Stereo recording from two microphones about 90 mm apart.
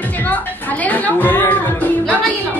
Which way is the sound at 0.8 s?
20° left (ahead or behind).